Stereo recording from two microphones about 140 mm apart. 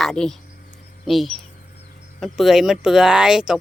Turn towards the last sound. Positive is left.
turn(degrees=-5)  # may be behind; listen again after turning